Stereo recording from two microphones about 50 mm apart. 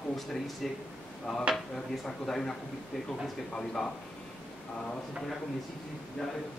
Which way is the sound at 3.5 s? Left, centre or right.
Centre.